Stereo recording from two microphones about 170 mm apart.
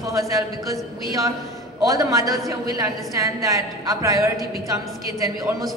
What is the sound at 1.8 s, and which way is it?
A woman's voice, 20° right (ahead or behind).